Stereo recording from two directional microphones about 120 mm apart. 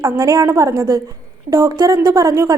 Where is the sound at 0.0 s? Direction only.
30° right (ahead or behind).